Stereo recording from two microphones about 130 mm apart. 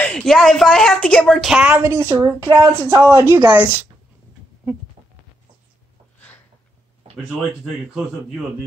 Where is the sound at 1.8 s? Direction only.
25° right (ahead or behind).